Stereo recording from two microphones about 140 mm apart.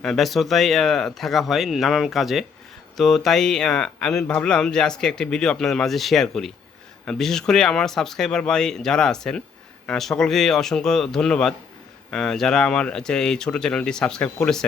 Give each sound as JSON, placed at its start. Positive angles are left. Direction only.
{"t": 0.0, "sound": "speech", "side_deg": 0}